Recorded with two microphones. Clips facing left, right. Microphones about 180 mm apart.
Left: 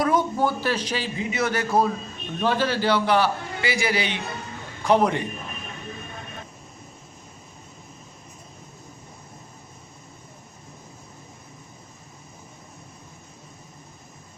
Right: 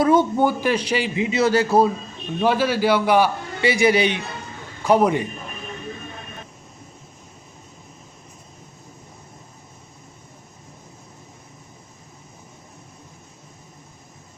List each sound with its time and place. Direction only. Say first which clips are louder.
0.0 s a man's voice: right 5 dB; 25° right (ahead or behind)
0.4 s a man's voice: right 4 dB; 15° right (ahead or behind)
1.2 s a man's voice: right 7 dB; 25° right (ahead or behind)
2.4 s a man's voice: right 4 dB; 10° right (ahead or behind)
4.9 s a man's voice: right 3 dB; 10° right (ahead or behind)